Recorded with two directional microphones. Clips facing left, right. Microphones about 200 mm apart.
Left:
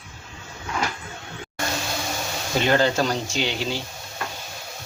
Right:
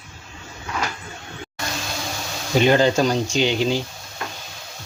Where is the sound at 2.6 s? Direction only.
15° right (ahead or behind).